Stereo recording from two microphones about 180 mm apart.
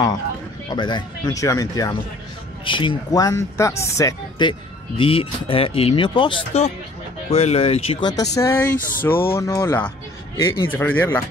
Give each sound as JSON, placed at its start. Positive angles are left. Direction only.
{"t": 0.7, "sound": "speech", "side_deg": 25}